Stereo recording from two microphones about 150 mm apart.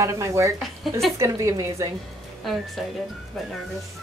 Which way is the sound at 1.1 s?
20° right (ahead or behind).